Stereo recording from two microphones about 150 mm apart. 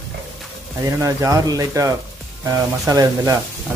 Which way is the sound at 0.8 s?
20° right (ahead or behind).